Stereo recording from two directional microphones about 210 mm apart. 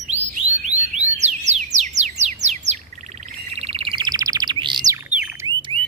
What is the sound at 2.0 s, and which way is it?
Bird, 35° right (ahead or behind).